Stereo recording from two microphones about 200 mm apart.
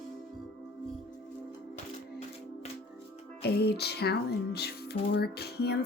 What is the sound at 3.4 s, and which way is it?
Speech, 55° left (ahead or behind).